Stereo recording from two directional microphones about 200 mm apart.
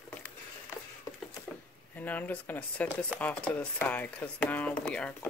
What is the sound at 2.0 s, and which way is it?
Speech, 10° left (ahead or behind).